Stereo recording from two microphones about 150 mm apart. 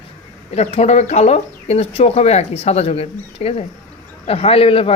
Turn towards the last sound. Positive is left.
turn(degrees=40)  # may be behind; listen again after turning